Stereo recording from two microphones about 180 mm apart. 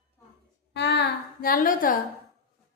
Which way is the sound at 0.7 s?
70° left (ahead or behind).